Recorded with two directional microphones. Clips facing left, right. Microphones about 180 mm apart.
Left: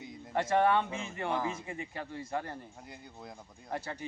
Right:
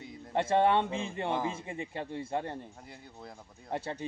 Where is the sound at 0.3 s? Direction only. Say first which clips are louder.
Right 1 dB; 25° right (ahead or behind).